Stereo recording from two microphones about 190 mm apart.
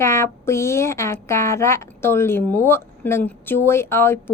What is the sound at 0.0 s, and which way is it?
Speech, 15° left (ahead or behind).